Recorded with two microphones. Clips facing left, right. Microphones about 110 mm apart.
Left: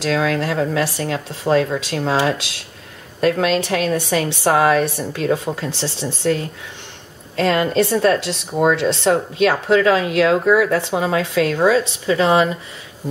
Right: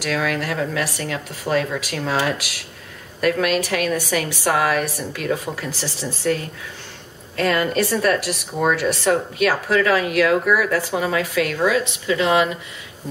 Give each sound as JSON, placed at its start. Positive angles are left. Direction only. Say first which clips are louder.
{"t": 0.0, "sound": "a woman's voice", "louder": "left 4 dB", "side_deg": 25}